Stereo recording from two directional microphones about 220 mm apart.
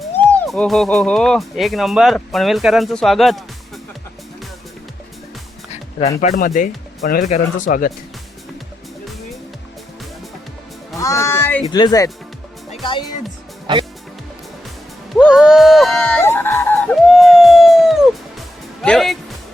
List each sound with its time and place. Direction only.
0.3 s speech: 5° left (ahead or behind)
6.1 s speech: 40° left (ahead or behind)
10.9 s music: 15° left (ahead or behind)
11.7 s speech: 15° left (ahead or behind)
15.1 s a sound: centre (ahead or behind)